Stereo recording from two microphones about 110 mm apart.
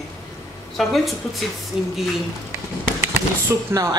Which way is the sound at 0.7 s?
Centre (ahead or behind).